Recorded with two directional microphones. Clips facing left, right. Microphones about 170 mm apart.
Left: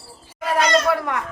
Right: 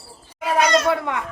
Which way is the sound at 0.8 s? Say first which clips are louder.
Even; 20° right (ahead or behind).